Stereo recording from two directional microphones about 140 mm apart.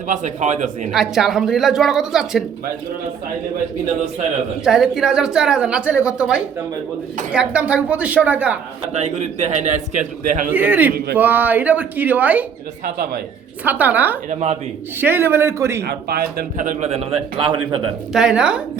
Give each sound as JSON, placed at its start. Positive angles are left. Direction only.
{"t": 0.1, "sound": "speech", "side_deg": -60}
{"t": 0.9, "sound": "a woman's voice", "side_deg": -5}
{"t": 4.6, "sound": "a woman's voice", "side_deg": -5}
{"t": 8.9, "sound": "speech", "side_deg": -55}
{"t": 10.5, "sound": "speech", "side_deg": -10}
{"t": 12.8, "sound": "speech", "side_deg": -90}
{"t": 13.7, "sound": "speech", "side_deg": -10}
{"t": 14.3, "sound": "a man's voice", "side_deg": -50}
{"t": 15.0, "sound": "speech", "side_deg": -15}
{"t": 16.0, "sound": "a man's voice", "side_deg": -90}
{"t": 18.1, "sound": "a woman's voice", "side_deg": -5}